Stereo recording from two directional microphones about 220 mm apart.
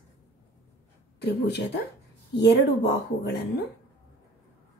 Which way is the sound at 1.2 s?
50° left (ahead or behind).